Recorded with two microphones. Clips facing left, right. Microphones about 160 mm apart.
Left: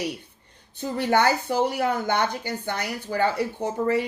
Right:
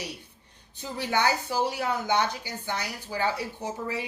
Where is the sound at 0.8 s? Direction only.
55° left (ahead or behind).